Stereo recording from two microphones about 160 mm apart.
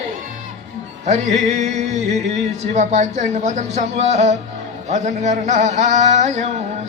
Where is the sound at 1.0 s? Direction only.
45° right (ahead or behind).